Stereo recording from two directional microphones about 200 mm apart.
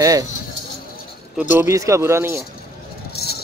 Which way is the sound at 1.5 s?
15° right (ahead or behind).